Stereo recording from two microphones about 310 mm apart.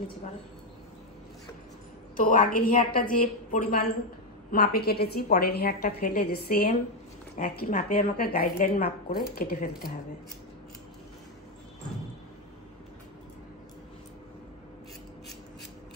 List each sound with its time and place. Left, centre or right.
2.1 s a woman's voice: left